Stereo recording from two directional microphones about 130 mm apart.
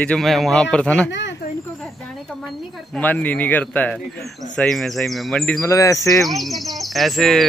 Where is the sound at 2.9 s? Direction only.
15° left (ahead or behind).